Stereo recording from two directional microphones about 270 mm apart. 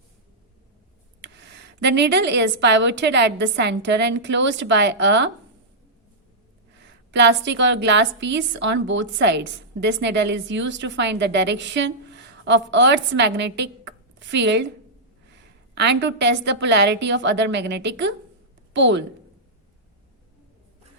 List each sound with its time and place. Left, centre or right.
1.2 s a woman's voice: right
6.7 s a woman's voice: right
15.7 s a woman's voice: right